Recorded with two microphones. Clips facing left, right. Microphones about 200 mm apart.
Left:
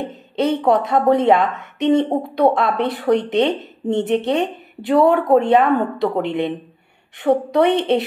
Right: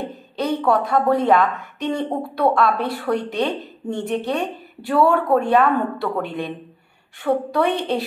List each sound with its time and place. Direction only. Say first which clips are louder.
0.1 s a woman's voice: left 4 dB; 20° left (ahead or behind)